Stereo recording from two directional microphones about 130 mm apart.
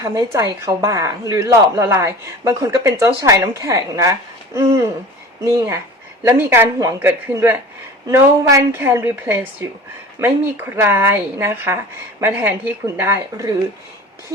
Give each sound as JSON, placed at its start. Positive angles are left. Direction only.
{"t": 0.0, "sound": "a woman's voice", "side_deg": -25}
{"t": 5.5, "sound": "a woman's voice", "side_deg": -20}